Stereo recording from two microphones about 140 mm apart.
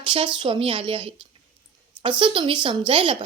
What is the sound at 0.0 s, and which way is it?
A woman's voice, 35° right (ahead or behind).